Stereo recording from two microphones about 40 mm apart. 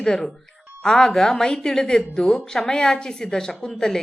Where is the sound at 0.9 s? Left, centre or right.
Centre.